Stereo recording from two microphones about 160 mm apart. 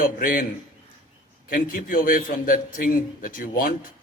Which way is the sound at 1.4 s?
60° left (ahead or behind).